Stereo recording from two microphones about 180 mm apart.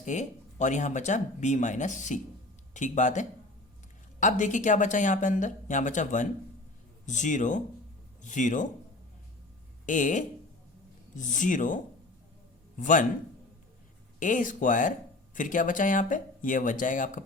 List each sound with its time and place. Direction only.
0.0 s speech: 40° left (ahead or behind)
9.8 s speech: 45° left (ahead or behind)
14.2 s speech: 45° left (ahead or behind)